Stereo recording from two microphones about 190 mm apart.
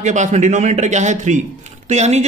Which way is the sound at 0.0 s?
40° right (ahead or behind).